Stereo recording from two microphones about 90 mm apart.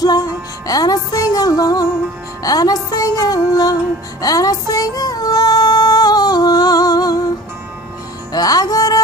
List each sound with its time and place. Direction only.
0.0 s music: 45° left (ahead or behind)
4.2 s female singing: 45° left (ahead or behind)
8.3 s music: 45° left (ahead or behind)